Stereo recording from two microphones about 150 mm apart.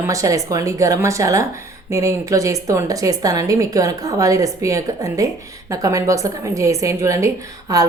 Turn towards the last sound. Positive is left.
turn(degrees=-25)  # may be behind; listen again after turning